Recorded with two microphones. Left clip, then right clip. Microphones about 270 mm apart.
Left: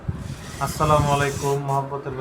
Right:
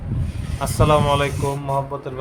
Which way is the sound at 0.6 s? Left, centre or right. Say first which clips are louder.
Right 2 dB; right.